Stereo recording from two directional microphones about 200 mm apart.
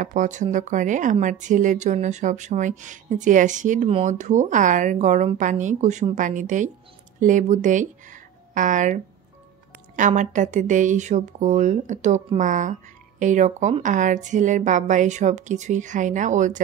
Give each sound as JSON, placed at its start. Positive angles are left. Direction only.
{"t": 0.0, "sound": "speech", "side_deg": -40}